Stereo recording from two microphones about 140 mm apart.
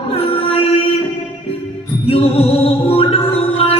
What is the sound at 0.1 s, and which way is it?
Music, 40° left (ahead or behind).